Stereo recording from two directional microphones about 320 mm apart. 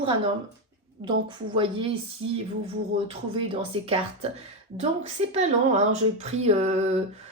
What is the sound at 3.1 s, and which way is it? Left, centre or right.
Speech, centre.